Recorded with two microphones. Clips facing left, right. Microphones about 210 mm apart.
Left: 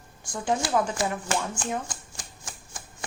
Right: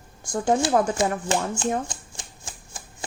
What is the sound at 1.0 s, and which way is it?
Speech, 25° right (ahead or behind).